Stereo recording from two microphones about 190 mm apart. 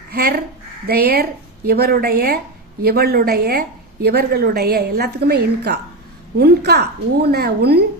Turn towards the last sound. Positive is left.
turn(degrees=-60)  # may be behind; listen again after turning